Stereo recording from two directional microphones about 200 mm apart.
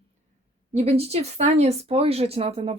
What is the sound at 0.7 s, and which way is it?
Speech, 30° right (ahead or behind).